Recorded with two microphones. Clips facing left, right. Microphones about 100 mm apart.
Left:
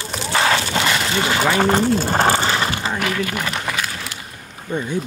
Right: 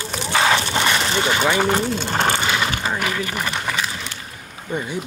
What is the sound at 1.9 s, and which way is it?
Vehicle, 40° left (ahead or behind).